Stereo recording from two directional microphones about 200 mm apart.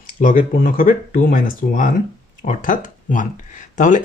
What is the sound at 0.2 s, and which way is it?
Speech, 40° left (ahead or behind).